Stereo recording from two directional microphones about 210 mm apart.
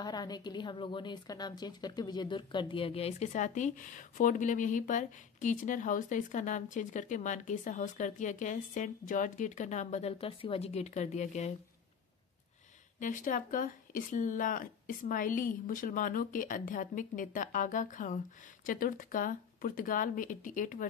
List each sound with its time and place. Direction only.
0.0 s a woman's voice: 20° left (ahead or behind)
13.0 s a woman's voice: 40° left (ahead or behind)